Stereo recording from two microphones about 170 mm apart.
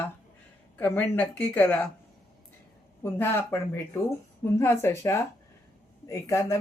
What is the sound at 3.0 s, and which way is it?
Speech, 15° left (ahead or behind).